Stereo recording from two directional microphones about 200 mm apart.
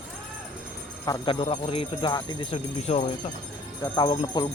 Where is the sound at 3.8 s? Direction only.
20° left (ahead or behind).